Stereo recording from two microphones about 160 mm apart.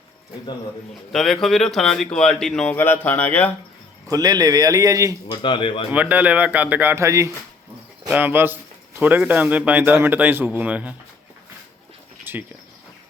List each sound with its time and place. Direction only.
1.1 s speech: centre (ahead or behind)
4.1 s a man's voice: 25° right (ahead or behind)
5.3 s a man's voice: 30° left (ahead or behind)
5.9 s a man's voice: 10° right (ahead or behind)
12.2 s a sound: 10° right (ahead or behind)